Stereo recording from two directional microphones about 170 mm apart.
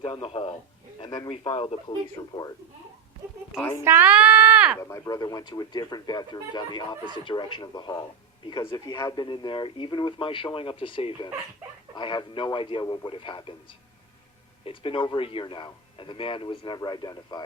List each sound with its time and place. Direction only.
0.0 s speech: 30° left (ahead or behind)
3.8 s speech: 10° right (ahead or behind)
4.8 s speech: 20° left (ahead or behind)